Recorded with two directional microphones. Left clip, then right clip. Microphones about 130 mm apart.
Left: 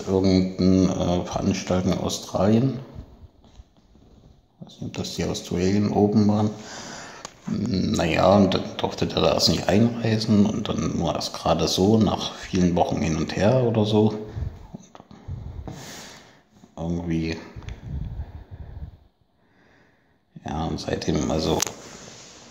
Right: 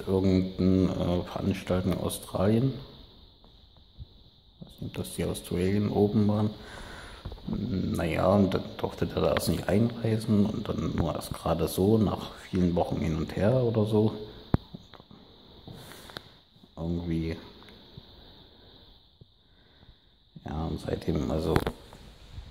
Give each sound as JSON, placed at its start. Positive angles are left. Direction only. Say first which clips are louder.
{"t": 0.0, "sound": "speech", "louder": "left 5 dB", "side_deg": -20}
{"t": 4.6, "sound": "speech", "louder": "left 6 dB", "side_deg": -15}
{"t": 16.7, "sound": "speech", "louder": "left 5 dB", "side_deg": -20}
{"t": 20.4, "sound": "speech", "louder": "left 7 dB", "side_deg": -20}